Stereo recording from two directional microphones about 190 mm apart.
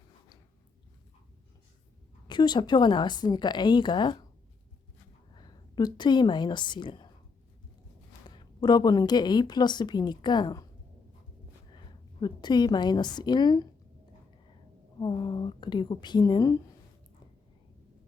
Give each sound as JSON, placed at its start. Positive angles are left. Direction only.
{"t": 2.2, "sound": "a woman's voice", "side_deg": 25}
{"t": 5.3, "sound": "a woman's voice", "side_deg": 20}
{"t": 8.3, "sound": "a woman's voice", "side_deg": 25}
{"t": 11.7, "sound": "a woman's voice", "side_deg": 25}
{"t": 14.9, "sound": "a woman's voice", "side_deg": 20}